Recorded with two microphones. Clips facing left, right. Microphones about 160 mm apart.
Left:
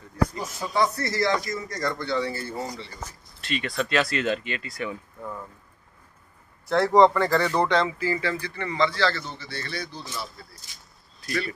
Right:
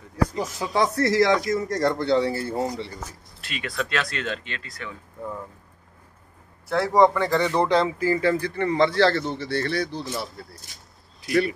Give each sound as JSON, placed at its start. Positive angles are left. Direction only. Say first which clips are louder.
{"t": 0.4, "sound": "speech", "louder": "right 4 dB", "side_deg": -90}
{"t": 1.4, "sound": "speech", "louder": "right 7 dB", "side_deg": -65}
{"t": 3.0, "sound": "speech", "louder": "right 1 dB", "side_deg": -5}
{"t": 6.7, "sound": "speech", "louder": "left 1 dB", "side_deg": -10}
{"t": 7.7, "sound": "a man's voice", "louder": "right 3 dB", "side_deg": -40}
{"t": 9.4, "sound": "speech", "louder": "right 9 dB", "side_deg": -70}
{"t": 10.0, "sound": "speech", "louder": "right 5 dB", "side_deg": -55}